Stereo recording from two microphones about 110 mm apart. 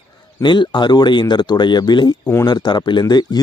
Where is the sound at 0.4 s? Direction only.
45° left (ahead or behind).